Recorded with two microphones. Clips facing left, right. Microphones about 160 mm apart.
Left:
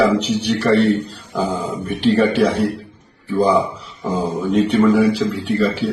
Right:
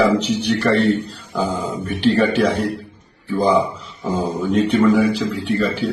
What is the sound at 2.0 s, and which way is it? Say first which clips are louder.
Speech: left 1 dB; centre (ahead or behind).